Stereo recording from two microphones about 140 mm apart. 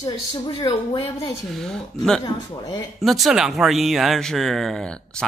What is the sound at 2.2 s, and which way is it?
Speech, 25° left (ahead or behind).